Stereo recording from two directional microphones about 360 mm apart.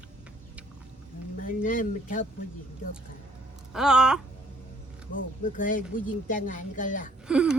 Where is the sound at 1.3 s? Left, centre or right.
Left.